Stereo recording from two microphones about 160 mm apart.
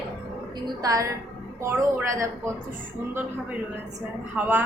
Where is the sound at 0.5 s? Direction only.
25° right (ahead or behind).